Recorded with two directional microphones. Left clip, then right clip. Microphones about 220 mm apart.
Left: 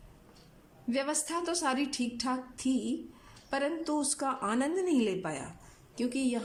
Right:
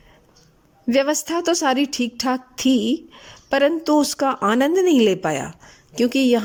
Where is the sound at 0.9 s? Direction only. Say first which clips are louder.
Right 14 dB; 35° right (ahead or behind).